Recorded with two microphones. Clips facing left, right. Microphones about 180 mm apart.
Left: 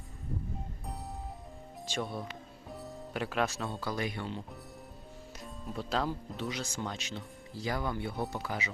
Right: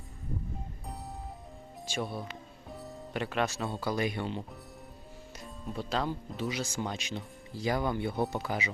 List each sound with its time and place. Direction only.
1.9 s speech: 5° right (ahead or behind)
2.6 s music: centre (ahead or behind)
3.8 s speech: 15° right (ahead or behind)
5.4 s speech: centre (ahead or behind); by 8.7 s 20° right (ahead or behind)